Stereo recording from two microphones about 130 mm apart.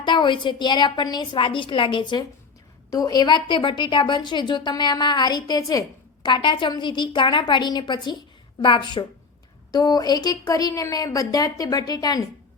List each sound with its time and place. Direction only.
0.0 s a woman's voice: 35° left (ahead or behind)